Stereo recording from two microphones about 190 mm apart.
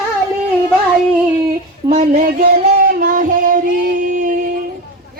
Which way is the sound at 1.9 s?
35° right (ahead or behind).